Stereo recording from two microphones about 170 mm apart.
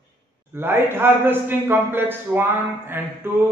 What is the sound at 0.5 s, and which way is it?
Speech, 15° right (ahead or behind).